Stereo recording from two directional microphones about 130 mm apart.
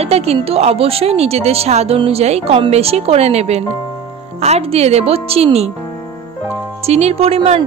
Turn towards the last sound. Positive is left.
turn(degrees=-45)  # may be behind; listen again after turning